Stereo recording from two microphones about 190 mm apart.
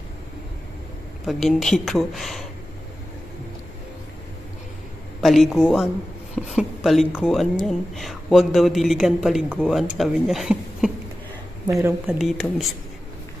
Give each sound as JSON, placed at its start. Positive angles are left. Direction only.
{"t": 1.2, "sound": "a woman's voice", "side_deg": 0}
{"t": 5.2, "sound": "a woman's voice", "side_deg": 0}
{"t": 11.6, "sound": "speech", "side_deg": -15}
{"t": 12.1, "sound": "a woman's voice", "side_deg": 0}